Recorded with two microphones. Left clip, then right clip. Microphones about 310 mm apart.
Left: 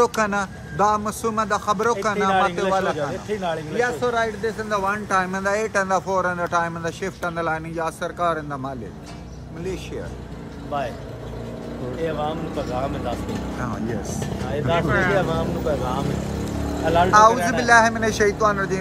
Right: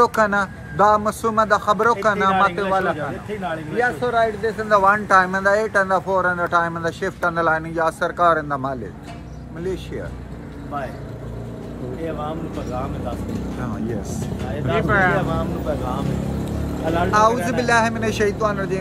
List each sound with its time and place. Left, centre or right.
0.0 s a man's voice: centre
12.0 s speech: left
14.8 s a man's voice: centre
15.1 s speech: left
17.1 s a man's voice: centre